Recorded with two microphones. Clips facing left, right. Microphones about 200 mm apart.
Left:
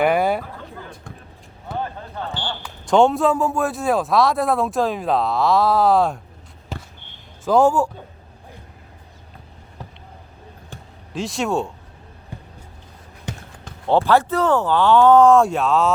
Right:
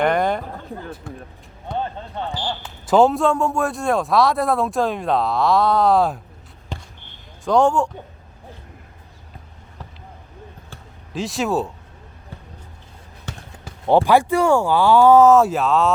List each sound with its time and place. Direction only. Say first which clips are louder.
0.0 s a sound: left 1 dB; 5° left (ahead or behind)
1.1 s basketball bounce: right 5 dB; 5° right (ahead or behind)
1.7 s a sound: right 2 dB; 5° left (ahead or behind)
2.2 s speech: right 2 dB; 25° right (ahead or behind)
2.8 s speech: even; 5° right (ahead or behind)
6.7 s basketball bounce: left 1 dB; 5° left (ahead or behind)
7.4 s speech: left 1 dB; 5° left (ahead or behind)
11.1 s speech: right 1 dB; centre (ahead or behind)
13.3 s basketball bounce: left 3 dB; 15° left (ahead or behind)
13.7 s speech: right 2 dB; 15° right (ahead or behind)